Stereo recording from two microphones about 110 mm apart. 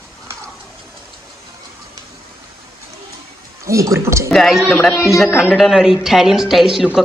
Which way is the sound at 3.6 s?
25° right (ahead or behind).